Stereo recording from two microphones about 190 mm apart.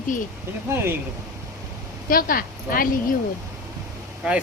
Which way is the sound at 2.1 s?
50° left (ahead or behind).